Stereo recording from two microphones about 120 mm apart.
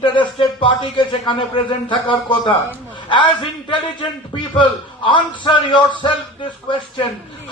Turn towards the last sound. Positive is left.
turn(degrees=45)  # may be behind; listen again after turning